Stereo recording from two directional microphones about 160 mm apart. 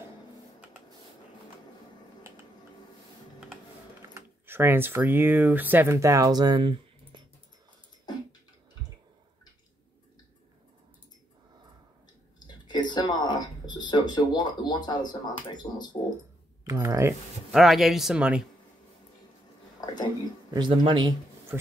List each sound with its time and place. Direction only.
4.1 s speech: 15° right (ahead or behind); by 7.2 s 30° right (ahead or behind)
12.6 s a sound: 25° left (ahead or behind)
16.6 s speech: 20° right (ahead or behind)
17.5 s speech: centre (ahead or behind)
19.8 s a sound: 25° left (ahead or behind)
20.5 s speech: 30° right (ahead or behind)